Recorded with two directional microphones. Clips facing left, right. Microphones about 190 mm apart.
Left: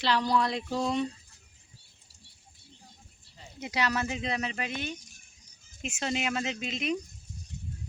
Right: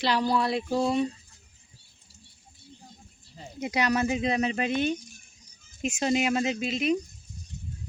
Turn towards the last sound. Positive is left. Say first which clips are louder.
# right 6 dB
turn(degrees=-5)  # may be behind; listen again after turning